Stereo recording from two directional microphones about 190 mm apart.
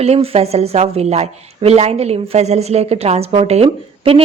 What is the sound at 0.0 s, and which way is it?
A woman's voice, 35° right (ahead or behind).